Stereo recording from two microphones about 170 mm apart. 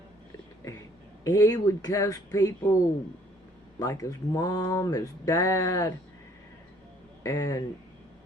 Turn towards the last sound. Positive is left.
turn(degrees=20)  # may be behind; listen again after turning